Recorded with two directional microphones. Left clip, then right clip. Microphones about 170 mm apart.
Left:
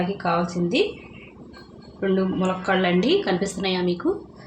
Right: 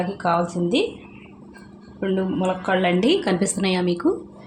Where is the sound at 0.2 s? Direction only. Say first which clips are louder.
Right 3 dB; 30° right (ahead or behind).